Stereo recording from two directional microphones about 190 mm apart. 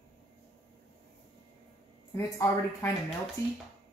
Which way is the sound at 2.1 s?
15° left (ahead or behind).